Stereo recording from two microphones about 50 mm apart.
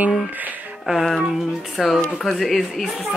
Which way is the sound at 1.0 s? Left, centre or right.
Centre.